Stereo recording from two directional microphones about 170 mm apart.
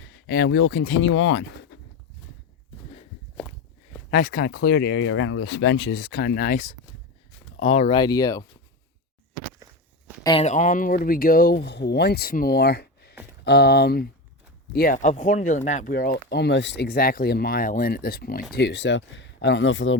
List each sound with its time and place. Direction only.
0.3 s speech: 90° left
4.1 s speech: 60° left (ahead or behind)
7.6 s speech: 40° left (ahead or behind)
7.9 s speech: 25° left (ahead or behind)
10.4 s speech: 45° left (ahead or behind); by 18.4 s 65° left (ahead or behind)
18.5 s speech: 90° left